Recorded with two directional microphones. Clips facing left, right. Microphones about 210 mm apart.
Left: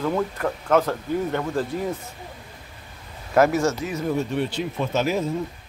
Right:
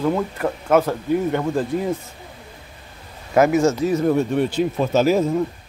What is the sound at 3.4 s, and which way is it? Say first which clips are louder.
Speech: right 3 dB; 10° right (ahead or behind).